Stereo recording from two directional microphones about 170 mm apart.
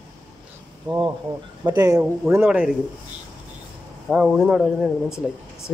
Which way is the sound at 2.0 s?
10° right (ahead or behind).